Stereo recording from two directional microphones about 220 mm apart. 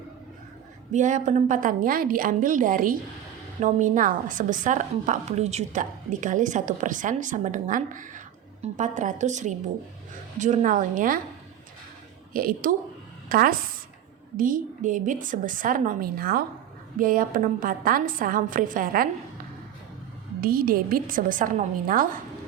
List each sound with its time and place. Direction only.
0.9 s a woman's voice: 35° right (ahead or behind)
12.3 s a woman's voice: 40° right (ahead or behind)
20.4 s a woman's voice: 40° right (ahead or behind)